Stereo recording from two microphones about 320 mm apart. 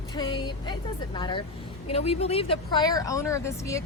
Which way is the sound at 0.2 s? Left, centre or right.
Centre.